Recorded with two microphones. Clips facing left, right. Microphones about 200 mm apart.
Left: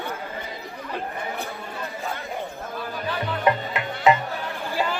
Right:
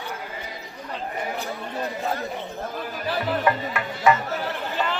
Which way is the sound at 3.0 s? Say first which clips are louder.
Right 4 dB; 35° right (ahead or behind).